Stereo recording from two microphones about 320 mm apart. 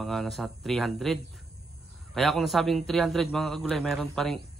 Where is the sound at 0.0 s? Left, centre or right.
Centre.